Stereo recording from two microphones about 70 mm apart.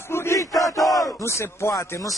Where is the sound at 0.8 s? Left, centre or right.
Centre.